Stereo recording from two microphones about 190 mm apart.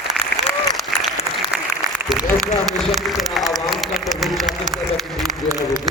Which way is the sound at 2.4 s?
Centre (ahead or behind).